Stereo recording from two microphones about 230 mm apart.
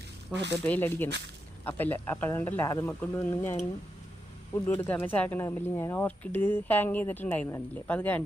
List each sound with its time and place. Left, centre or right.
0.6 s speech: centre
4.6 s speech: centre